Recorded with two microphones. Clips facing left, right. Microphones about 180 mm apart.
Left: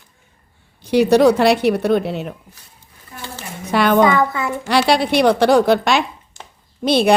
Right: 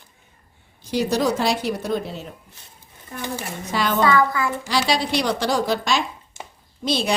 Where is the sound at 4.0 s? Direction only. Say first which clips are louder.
Left 3 dB; 20° left (ahead or behind).